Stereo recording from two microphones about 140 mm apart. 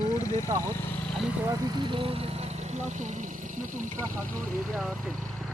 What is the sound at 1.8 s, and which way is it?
Speech, 40° right (ahead or behind).